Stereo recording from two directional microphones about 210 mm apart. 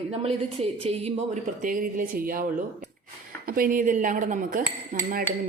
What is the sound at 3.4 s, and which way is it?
Speech, 45° right (ahead or behind).